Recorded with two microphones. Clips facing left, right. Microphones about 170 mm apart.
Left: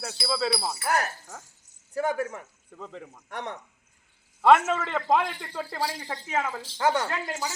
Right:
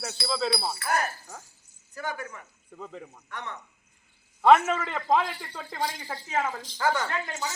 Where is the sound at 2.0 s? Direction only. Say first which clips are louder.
Left 8 dB; 80° left.